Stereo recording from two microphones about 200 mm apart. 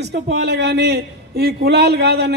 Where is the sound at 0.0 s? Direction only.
55° right (ahead or behind).